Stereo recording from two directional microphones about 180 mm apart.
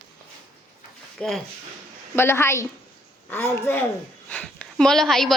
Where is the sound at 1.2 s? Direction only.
5° left (ahead or behind).